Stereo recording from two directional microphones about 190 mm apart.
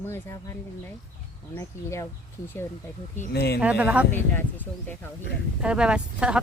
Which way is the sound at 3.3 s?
60° left (ahead or behind).